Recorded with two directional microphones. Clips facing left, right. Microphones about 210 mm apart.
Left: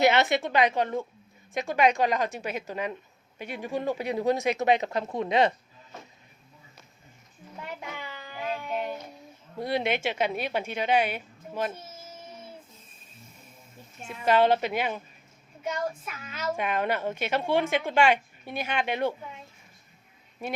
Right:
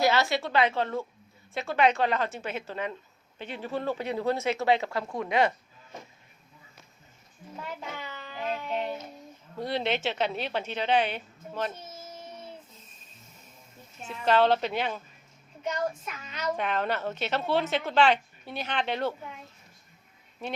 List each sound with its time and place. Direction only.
0.0 s a woman's voice: 20° left (ahead or behind)
7.8 s a sound: 10° left (ahead or behind)
9.6 s a woman's voice: 10° left (ahead or behind)
14.0 s a woman's voice: 10° left (ahead or behind)
20.4 s a woman's voice: 10° left (ahead or behind)